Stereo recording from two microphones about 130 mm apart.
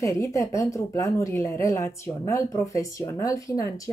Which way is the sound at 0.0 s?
25° left (ahead or behind).